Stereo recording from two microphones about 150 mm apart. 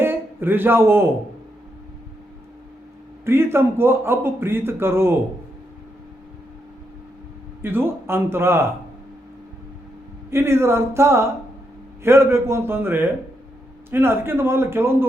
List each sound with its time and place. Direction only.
0.0 s a man's voice: 15° right (ahead or behind)
3.2 s a man's voice: 15° right (ahead or behind)
7.6 s a man's voice: 15° right (ahead or behind)
10.2 s a man's voice: 15° right (ahead or behind)